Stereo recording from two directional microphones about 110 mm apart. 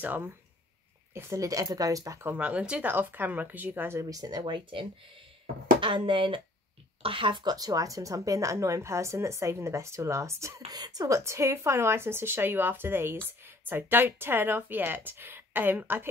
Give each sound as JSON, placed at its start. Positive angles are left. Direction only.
{"t": 0.0, "sound": "speech", "side_deg": -15}
{"t": 1.1, "sound": "speech", "side_deg": -30}
{"t": 2.2, "sound": "speech", "side_deg": -15}